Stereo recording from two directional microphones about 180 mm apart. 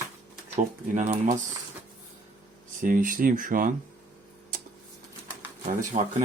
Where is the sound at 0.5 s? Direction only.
40° right (ahead or behind).